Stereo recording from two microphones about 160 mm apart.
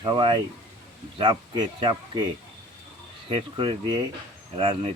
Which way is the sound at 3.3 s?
30° right (ahead or behind).